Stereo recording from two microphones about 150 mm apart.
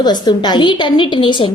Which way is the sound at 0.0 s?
30° left (ahead or behind).